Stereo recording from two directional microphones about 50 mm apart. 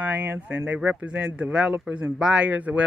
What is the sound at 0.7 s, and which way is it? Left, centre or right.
Speech, right.